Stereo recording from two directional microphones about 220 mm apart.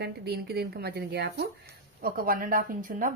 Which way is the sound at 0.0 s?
45° right (ahead or behind).